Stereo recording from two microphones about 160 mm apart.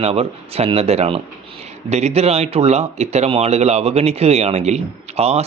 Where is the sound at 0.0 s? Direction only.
40° right (ahead or behind).